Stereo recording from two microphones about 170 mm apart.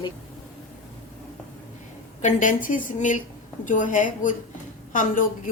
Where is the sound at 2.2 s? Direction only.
50° left (ahead or behind).